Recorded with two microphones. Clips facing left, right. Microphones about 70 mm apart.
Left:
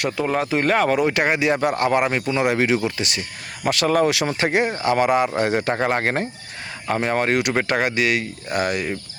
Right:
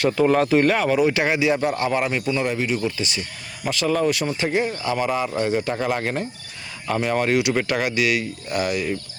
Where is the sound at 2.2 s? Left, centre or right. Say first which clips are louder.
Left 3 dB; left.